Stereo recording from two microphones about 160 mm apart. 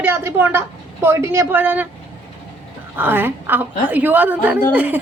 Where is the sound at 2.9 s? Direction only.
15° right (ahead or behind).